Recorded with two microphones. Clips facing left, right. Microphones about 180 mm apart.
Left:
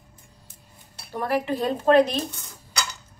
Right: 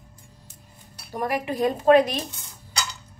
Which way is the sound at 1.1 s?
10° right (ahead or behind).